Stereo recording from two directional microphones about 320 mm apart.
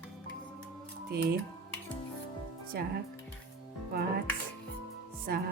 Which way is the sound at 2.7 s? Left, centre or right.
Right.